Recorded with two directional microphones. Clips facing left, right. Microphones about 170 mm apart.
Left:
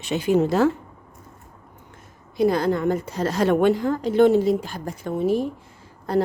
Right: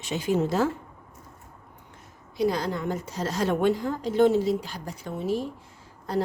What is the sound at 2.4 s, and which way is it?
A woman's voice, 55° left (ahead or behind).